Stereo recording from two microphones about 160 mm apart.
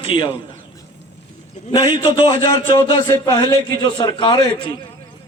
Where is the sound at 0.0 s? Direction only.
35° left (ahead or behind).